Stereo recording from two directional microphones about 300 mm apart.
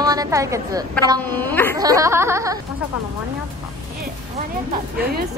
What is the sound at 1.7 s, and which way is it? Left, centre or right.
Speech, centre.